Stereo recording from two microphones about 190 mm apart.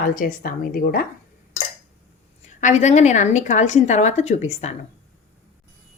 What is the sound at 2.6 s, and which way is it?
A woman's voice, 40° left (ahead or behind).